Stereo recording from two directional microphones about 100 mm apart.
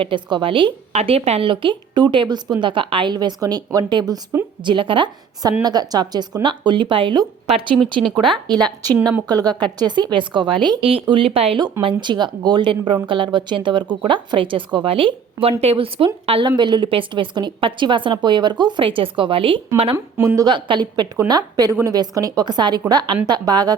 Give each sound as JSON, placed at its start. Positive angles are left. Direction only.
{"t": 0.0, "sound": "a woman's voice", "side_deg": -55}
{"t": 1.5, "sound": "a woman's voice", "side_deg": -55}
{"t": 4.6, "sound": "a woman's voice", "side_deg": -55}
{"t": 5.6, "sound": "a woman's voice", "side_deg": -40}
{"t": 11.1, "sound": "speech", "side_deg": -65}
{"t": 11.8, "sound": "a woman's voice", "side_deg": -55}
{"t": 16.6, "sound": "a woman's voice", "side_deg": -50}
{"t": 20.1, "sound": "a woman's voice", "side_deg": -30}
{"t": 20.5, "sound": "a woman's voice", "side_deg": -50}